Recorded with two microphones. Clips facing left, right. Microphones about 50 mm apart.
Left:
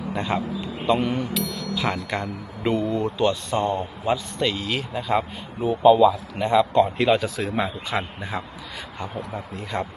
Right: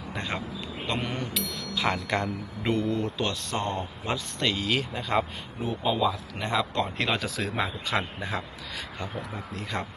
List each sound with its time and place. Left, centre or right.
0.2 s a man's voice: centre
3.5 s speech: centre
4.1 s a man's voice: centre